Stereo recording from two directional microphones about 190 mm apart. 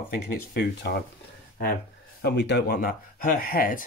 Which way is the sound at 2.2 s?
60° left (ahead or behind).